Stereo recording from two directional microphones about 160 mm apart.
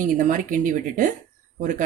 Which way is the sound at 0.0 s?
55° right (ahead or behind).